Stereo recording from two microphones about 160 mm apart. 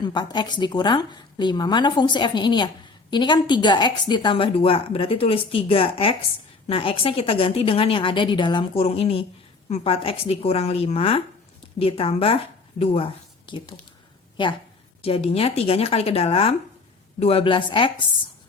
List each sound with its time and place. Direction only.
0.0 s a woman's voice: 30° left (ahead or behind)
14.4 s a woman's voice: 30° left (ahead or behind)